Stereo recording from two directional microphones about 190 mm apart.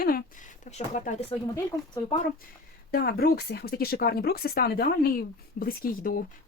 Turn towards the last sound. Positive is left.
turn(degrees=50)  # may be behind; listen again after turning